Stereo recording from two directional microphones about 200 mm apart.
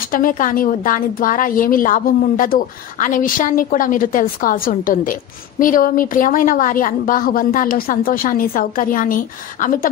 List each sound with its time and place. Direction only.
0.1 s a woman's voice: 45° left (ahead or behind)